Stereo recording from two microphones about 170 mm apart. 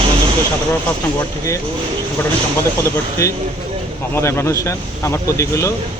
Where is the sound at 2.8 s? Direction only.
15° left (ahead or behind).